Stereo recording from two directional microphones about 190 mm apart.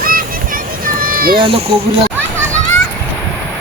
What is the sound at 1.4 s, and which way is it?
Speech, 30° right (ahead or behind).